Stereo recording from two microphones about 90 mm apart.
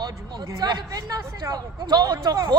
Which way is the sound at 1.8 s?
50° right (ahead or behind).